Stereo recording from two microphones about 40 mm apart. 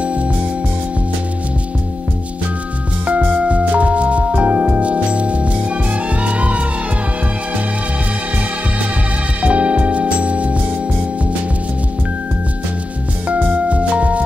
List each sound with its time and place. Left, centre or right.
0.0 s music: right
3.1 s music: right
9.4 s music: right
13.7 s music: right